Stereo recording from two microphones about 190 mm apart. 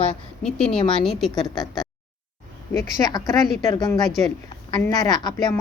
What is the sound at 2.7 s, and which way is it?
A woman's voice, 15° left (ahead or behind).